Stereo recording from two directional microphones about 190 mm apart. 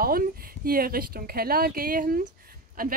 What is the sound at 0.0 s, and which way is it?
A woman's voice, 50° right (ahead or behind).